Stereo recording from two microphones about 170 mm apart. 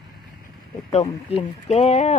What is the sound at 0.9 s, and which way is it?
Speech, 40° left (ahead or behind).